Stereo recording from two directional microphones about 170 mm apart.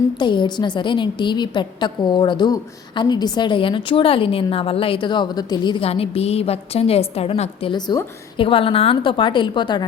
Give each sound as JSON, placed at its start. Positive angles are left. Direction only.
{"t": 0.2, "sound": "a woman's voice", "side_deg": 25}
{"t": 7.7, "sound": "a woman's voice", "side_deg": 25}